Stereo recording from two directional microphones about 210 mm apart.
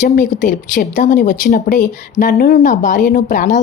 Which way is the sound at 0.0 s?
35° left (ahead or behind).